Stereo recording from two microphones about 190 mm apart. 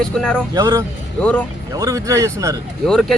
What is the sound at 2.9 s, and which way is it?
Speech, centre (ahead or behind).